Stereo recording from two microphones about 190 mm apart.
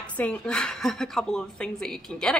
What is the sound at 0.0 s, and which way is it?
A woman's voice, 5° left (ahead or behind).